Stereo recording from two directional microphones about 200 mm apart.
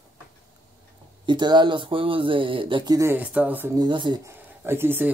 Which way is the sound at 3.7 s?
25° right (ahead or behind).